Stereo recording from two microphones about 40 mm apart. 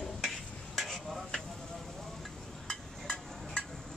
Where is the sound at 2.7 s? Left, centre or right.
Centre.